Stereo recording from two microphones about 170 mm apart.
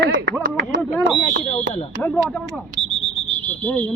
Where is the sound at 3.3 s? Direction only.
10° left (ahead or behind).